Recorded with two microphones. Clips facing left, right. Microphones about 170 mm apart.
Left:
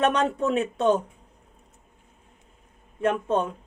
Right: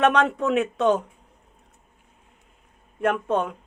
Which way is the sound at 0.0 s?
30° left (ahead or behind).